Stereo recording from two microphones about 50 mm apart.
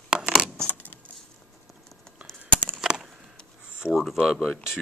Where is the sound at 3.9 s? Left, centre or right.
Centre.